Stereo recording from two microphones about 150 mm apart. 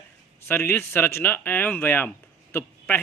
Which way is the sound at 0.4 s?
15° left (ahead or behind).